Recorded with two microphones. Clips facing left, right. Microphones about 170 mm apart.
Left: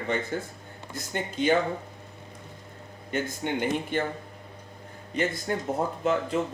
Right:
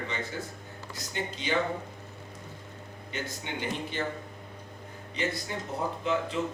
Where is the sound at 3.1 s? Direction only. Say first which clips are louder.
Left 8 dB; 50° left (ahead or behind).